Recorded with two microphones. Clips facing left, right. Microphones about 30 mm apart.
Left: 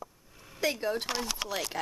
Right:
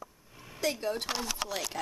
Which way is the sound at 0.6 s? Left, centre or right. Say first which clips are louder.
Left 2 dB; centre.